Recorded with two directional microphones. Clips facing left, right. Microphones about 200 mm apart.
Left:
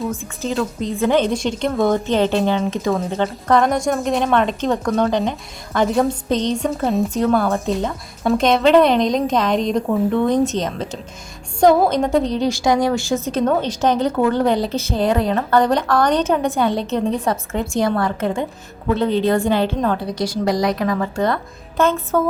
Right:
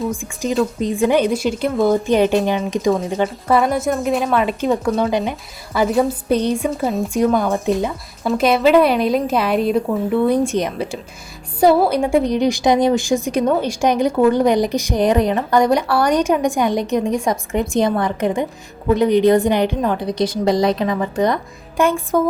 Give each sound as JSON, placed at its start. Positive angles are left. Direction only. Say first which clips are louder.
{"t": 0.1, "sound": "a woman's voice", "louder": "right 2 dB", "side_deg": -10}
{"t": 3.2, "sound": "a woman's voice", "louder": "left 1 dB", "side_deg": -5}
{"t": 7.3, "sound": "a woman's voice", "louder": "right 1 dB", "side_deg": -15}
{"t": 11.9, "sound": "a woman's voice", "louder": "right 1 dB", "side_deg": -10}